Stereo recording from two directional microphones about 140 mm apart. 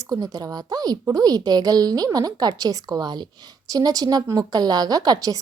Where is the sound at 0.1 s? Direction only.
25° right (ahead or behind).